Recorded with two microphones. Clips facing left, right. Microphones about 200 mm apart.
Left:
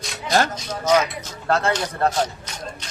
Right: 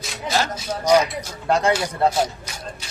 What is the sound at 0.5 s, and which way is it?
A man's voice, 10° right (ahead or behind).